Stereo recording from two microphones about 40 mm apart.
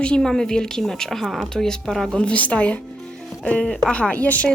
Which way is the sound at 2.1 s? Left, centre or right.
Left.